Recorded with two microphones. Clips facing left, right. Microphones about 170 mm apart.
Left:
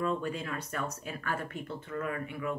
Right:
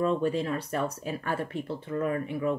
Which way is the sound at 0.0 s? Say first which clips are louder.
Right 6 dB; 35° right (ahead or behind).